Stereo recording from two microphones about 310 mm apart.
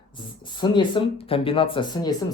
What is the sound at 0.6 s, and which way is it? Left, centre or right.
Speech, centre.